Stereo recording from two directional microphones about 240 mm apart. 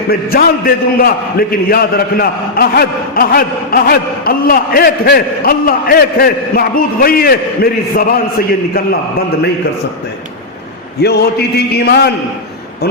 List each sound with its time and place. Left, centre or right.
0.1 s a man's voice: left
11.0 s a man's voice: left